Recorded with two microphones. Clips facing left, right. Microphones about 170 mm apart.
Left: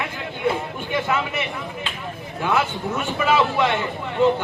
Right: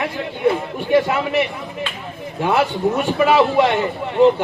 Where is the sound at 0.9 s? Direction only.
35° right (ahead or behind).